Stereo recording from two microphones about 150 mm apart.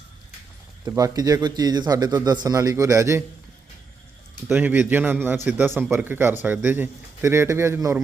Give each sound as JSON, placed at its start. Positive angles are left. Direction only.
{"t": 0.9, "sound": "speech", "side_deg": -25}
{"t": 4.4, "sound": "a man's voice", "side_deg": -10}